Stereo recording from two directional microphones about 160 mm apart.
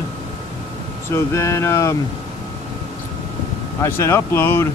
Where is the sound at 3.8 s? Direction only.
15° left (ahead or behind).